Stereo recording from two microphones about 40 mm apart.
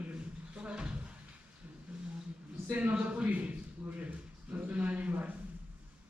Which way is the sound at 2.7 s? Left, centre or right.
Right.